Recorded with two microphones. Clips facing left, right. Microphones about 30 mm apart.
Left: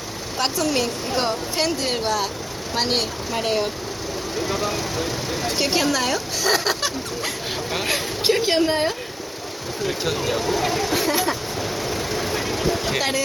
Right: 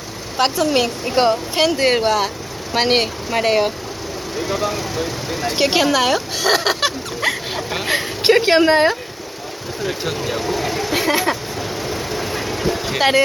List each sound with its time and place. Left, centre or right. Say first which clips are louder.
0.3 s speech: right 6 dB; right
0.6 s speech: right 5 dB; right
1.6 s speech: right 9 dB; right
4.4 s speech: right 4 dB; centre
5.5 s speech: right 6 dB; right
6.4 s a sound: right 3 dB; right
8.2 s a woman's voice: right 7 dB; right
9.8 s speech: right 1 dB; centre
10.9 s speech: right 7 dB; right
11.6 s vehicle: right 1 dB; centre
13.0 s speech: right 8 dB; right